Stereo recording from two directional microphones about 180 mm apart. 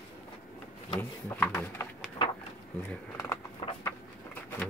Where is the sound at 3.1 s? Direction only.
15° left (ahead or behind).